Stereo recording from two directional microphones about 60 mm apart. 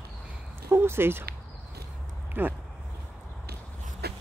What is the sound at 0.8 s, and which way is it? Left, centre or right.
Speech, right.